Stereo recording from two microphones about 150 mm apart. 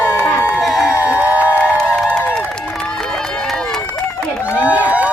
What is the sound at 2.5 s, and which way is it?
Run, 5° left (ahead or behind).